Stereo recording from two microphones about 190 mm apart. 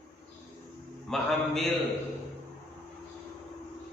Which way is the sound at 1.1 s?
Centre (ahead or behind).